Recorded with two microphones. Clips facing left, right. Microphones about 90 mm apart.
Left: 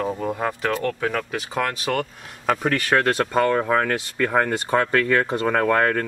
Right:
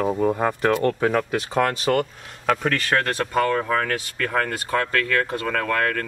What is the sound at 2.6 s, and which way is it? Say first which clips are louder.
Speech: left 2 dB; 15° left (ahead or behind).